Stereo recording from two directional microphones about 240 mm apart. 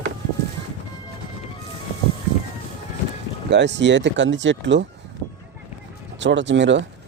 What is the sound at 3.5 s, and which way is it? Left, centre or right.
Speech, right.